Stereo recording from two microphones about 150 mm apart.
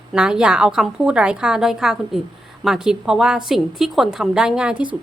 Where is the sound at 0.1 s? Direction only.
5° right (ahead or behind).